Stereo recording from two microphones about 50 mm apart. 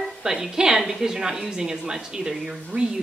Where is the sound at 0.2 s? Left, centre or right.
Centre.